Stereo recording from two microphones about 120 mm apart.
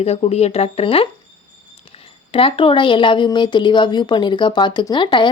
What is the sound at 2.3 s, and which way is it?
Speech, 50° left (ahead or behind).